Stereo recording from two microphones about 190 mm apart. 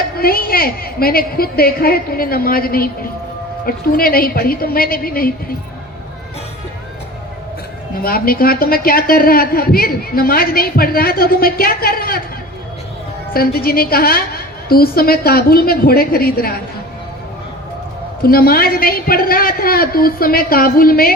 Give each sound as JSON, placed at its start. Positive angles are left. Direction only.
{"t": 0.2, "sound": "a woman's voice", "side_deg": 50}
{"t": 8.0, "sound": "a woman's voice", "side_deg": 50}
{"t": 13.3, "sound": "a woman's voice", "side_deg": 50}
{"t": 18.2, "sound": "a woman's voice", "side_deg": 50}